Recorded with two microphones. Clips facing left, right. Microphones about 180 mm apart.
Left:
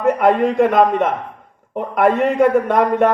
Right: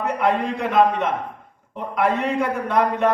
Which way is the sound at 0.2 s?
55° left (ahead or behind).